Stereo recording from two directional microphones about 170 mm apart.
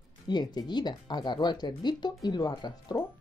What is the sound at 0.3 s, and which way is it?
Speech, 25° left (ahead or behind).